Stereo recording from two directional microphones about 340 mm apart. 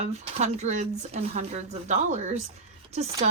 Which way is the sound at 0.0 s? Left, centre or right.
Centre.